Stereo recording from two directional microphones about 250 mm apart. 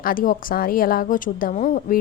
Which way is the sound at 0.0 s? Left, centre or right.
Left.